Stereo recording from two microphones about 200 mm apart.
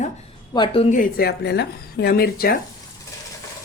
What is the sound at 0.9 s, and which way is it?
Speech, 45° left (ahead or behind).